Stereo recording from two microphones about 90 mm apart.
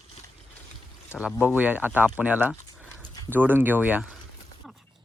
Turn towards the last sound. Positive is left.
turn(degrees=-20)  # may be behind; listen again after turning